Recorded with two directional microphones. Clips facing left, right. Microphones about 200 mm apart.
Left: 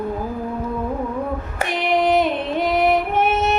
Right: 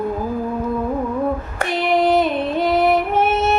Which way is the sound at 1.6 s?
15° left (ahead or behind).